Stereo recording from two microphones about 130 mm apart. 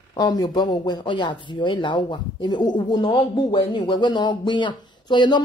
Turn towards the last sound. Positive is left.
turn(degrees=35)  # may be behind; listen again after turning